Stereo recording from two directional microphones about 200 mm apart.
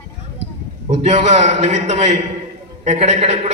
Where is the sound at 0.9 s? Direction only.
35° right (ahead or behind).